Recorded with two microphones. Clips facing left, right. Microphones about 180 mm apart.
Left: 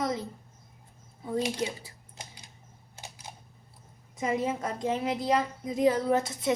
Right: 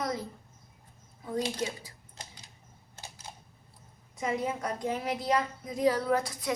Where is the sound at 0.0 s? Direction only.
25° left (ahead or behind).